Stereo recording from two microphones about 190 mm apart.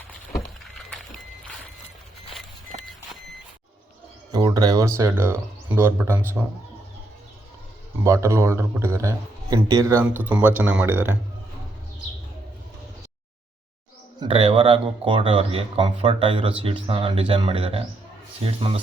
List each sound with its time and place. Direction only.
0.3 s a sound: centre (ahead or behind)
4.3 s a man's voice: 20° right (ahead or behind)
8.0 s a man's voice: 15° right (ahead or behind)
14.2 s speech: 25° right (ahead or behind)